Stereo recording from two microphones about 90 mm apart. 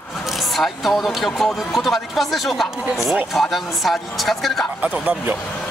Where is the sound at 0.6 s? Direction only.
Centre (ahead or behind).